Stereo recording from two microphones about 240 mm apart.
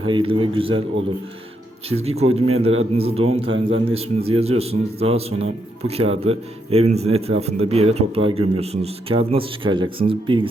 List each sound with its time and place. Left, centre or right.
0.0 s a man's voice: right
1.9 s a man's voice: right